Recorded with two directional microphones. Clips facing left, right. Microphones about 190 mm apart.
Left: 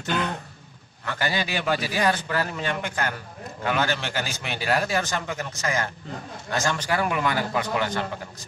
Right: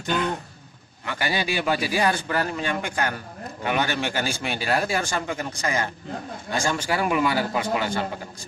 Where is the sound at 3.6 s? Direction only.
20° right (ahead or behind).